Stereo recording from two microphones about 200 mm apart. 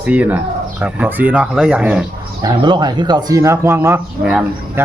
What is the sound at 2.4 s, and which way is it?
Speech, 20° right (ahead or behind).